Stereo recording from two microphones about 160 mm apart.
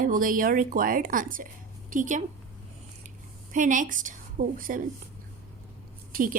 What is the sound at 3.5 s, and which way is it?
A woman's voice, 55° right (ahead or behind).